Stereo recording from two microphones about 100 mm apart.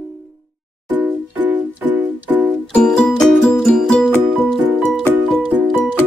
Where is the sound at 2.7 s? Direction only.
5° left (ahead or behind).